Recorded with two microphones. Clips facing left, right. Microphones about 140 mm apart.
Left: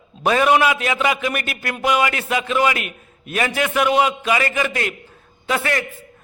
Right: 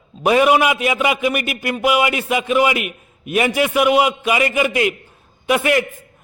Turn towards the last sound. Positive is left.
turn(degrees=-15)  # may be behind; listen again after turning